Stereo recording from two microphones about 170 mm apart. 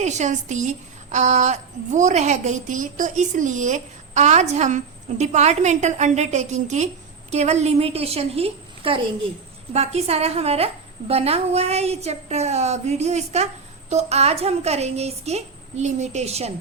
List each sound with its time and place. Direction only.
0.0 s a woman's voice: 45° right (ahead or behind)